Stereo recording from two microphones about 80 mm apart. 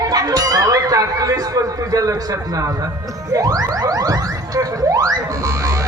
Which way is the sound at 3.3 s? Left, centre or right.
Right.